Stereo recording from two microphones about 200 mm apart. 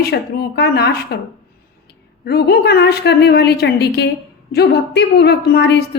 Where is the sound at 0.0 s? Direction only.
55° left (ahead or behind).